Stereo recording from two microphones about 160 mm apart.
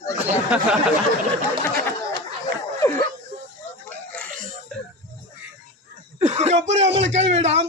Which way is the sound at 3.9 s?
5° left (ahead or behind).